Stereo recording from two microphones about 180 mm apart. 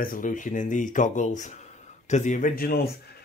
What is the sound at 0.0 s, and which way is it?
Speech, 50° left (ahead or behind).